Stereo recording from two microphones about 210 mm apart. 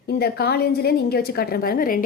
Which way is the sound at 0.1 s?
50° left (ahead or behind).